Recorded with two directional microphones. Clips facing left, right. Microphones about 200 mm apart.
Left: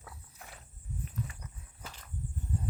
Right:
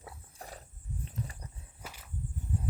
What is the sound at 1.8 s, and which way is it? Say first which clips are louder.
Walk: right 1 dB; 10° right (ahead or behind).